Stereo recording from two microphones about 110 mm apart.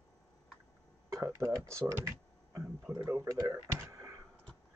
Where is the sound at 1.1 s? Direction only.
30° right (ahead or behind).